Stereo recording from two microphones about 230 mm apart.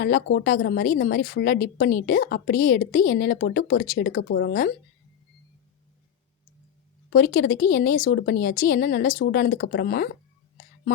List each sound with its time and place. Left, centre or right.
0.0 s a woman's voice: left
7.1 s a woman's voice: left